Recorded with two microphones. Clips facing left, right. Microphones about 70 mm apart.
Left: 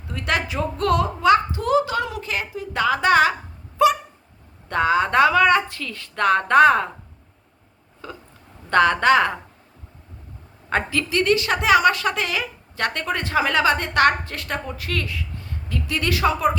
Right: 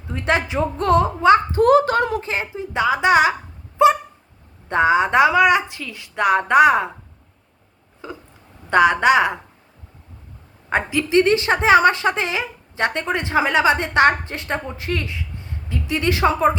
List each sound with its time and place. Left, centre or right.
0.1 s a woman's voice: right
1.5 s speech: right
2.2 s a woman's voice: right
3.8 s a sound: right
4.7 s a woman's voice: centre
8.0 s a sound: centre
8.7 s a woman's voice: centre
10.7 s a woman's voice: centre